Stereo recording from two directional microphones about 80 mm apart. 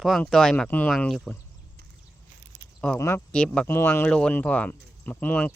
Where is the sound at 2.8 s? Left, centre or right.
Centre.